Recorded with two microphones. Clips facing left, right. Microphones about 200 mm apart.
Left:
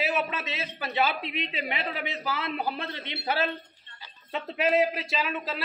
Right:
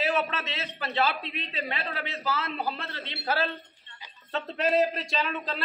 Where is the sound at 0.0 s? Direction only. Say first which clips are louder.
Right 1 dB; 10° left (ahead or behind).